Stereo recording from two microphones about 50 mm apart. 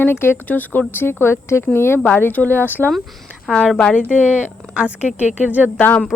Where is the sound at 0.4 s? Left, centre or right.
Left.